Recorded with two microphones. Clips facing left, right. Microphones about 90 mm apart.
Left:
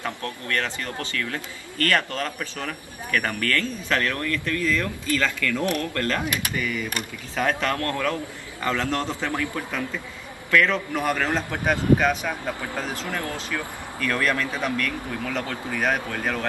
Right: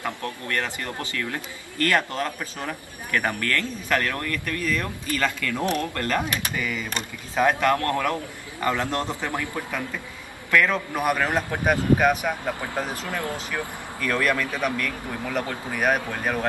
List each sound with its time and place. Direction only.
0.0 s a man's voice: 20° right (ahead or behind)